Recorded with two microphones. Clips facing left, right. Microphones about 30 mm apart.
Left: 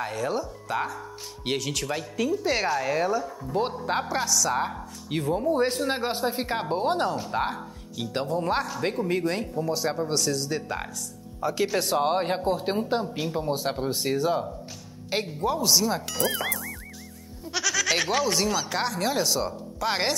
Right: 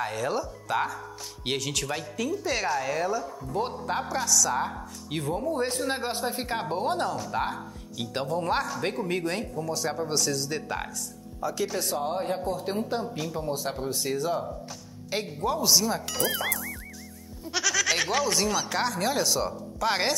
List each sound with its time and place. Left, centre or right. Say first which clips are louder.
0.0 s speech: even; centre
2.4 s speech: even; centre
4.7 s speech: left 3 dB; centre; by 7.4 s left
8.0 s speech: left 2 dB; centre
9.6 s speech: left 5 dB; centre
9.9 s speech: left 2 dB; centre
11.4 s speech: left 4 dB; left
11.8 s speech: left 5 dB; left
12.7 s speech: left 3 dB; centre
15.4 s speech: even; centre